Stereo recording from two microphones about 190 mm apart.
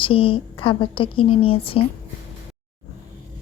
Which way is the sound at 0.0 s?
30° left (ahead or behind).